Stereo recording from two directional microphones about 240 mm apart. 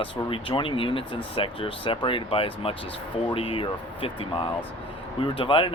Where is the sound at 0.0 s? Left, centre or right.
Left.